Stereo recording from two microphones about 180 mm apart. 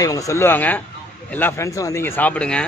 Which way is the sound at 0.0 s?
15° left (ahead or behind).